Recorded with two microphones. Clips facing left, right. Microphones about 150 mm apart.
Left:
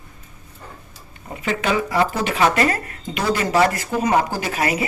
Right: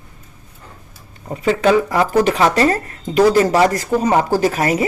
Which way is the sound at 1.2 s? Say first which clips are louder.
Right 8 dB; 30° right (ahead or behind).